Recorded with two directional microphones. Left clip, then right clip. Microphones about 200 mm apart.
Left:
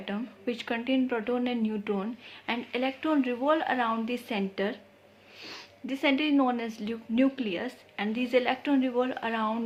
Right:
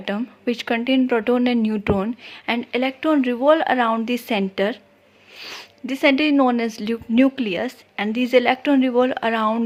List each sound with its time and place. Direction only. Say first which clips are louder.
0.0 s speech: right 9 dB; 45° right (ahead or behind)